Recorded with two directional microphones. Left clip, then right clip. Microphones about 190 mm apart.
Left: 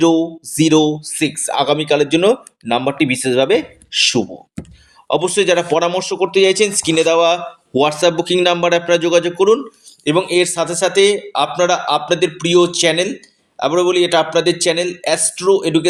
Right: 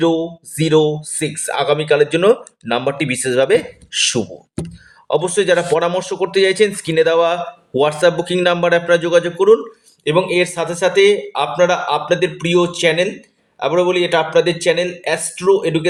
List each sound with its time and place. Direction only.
0.0 s speech: 30° left (ahead or behind)
10.0 s speech: 40° left (ahead or behind)